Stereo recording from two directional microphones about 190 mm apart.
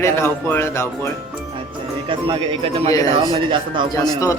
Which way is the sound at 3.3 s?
25° right (ahead or behind).